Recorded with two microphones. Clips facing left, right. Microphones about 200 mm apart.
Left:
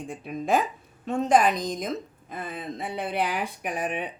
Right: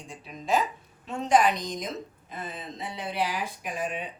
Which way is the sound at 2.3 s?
55° left (ahead or behind).